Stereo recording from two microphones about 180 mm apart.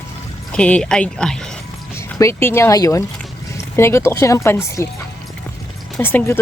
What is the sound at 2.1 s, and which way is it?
Speech, 15° left (ahead or behind).